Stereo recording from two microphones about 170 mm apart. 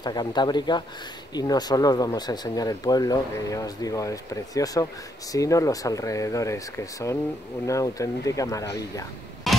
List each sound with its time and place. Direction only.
0.0 s speech: 25° left (ahead or behind)
9.5 s music: centre (ahead or behind)